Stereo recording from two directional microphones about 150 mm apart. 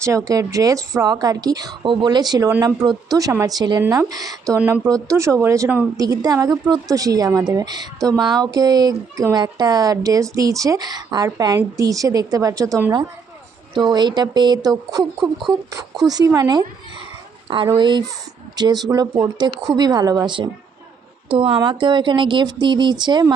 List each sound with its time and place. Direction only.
0.3 s a woman's voice: 25° right (ahead or behind)
17.7 s a woman's voice: 30° right (ahead or behind)